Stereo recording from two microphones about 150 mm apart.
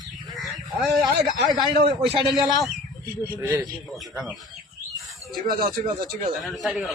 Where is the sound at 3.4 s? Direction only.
20° right (ahead or behind).